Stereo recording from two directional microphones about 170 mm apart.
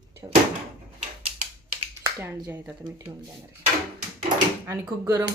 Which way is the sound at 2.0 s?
15° right (ahead or behind).